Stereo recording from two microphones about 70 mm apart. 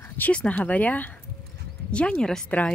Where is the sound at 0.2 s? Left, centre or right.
Centre.